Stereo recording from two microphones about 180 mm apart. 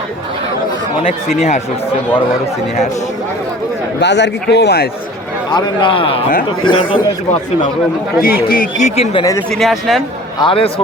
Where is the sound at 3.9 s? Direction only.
75° left (ahead or behind).